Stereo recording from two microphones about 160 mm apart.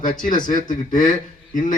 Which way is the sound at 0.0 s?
55° left (ahead or behind).